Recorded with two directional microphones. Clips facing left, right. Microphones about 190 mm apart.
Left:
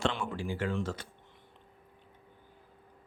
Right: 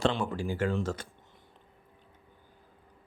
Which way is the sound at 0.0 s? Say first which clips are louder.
Right 4 dB; 35° right (ahead or behind).